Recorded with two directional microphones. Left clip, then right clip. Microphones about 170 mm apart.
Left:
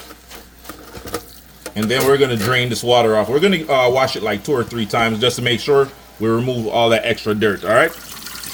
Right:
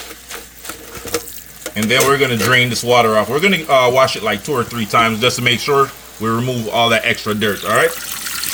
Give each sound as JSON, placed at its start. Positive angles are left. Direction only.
{"t": 1.7, "sound": "speech", "side_deg": 15}